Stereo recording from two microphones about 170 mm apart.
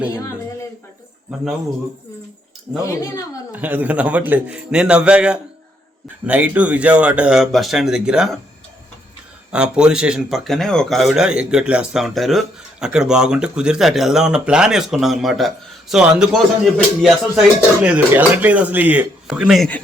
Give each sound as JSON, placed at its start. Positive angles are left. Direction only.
{"t": 2.8, "sound": "speech", "side_deg": 20}
{"t": 3.5, "sound": "speech", "side_deg": -10}
{"t": 9.5, "sound": "speech", "side_deg": -5}